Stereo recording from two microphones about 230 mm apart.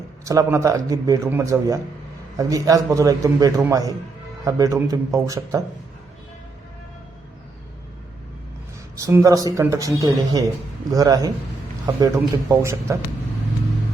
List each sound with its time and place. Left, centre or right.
0.3 s a man's voice: centre
9.0 s a man's voice: centre